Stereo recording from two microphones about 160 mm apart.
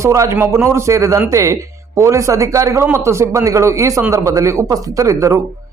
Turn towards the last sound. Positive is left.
turn(degrees=-20)  # may be behind; listen again after turning